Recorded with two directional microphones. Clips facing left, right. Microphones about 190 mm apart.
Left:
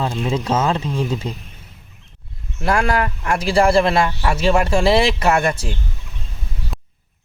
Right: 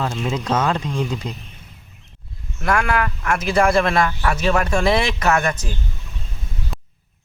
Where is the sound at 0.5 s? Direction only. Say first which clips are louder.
Even; 25° left (ahead or behind).